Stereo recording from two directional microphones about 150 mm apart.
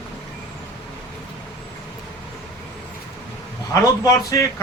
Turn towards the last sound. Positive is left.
turn(degrees=20)  # may be behind; listen again after turning